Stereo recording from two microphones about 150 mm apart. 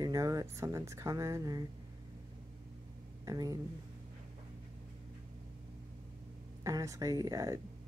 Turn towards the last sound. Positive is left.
turn(degrees=-25)  # may be behind; listen again after turning